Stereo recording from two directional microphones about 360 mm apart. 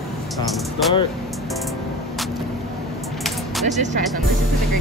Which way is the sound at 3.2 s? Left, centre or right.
Centre.